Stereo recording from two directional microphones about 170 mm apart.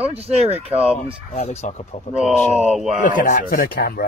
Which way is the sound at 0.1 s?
35° right (ahead or behind).